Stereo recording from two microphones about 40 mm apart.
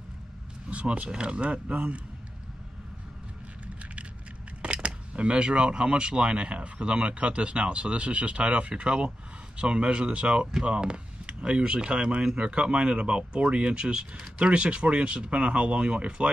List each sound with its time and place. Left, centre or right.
0.7 s speech: right
4.8 s speech: right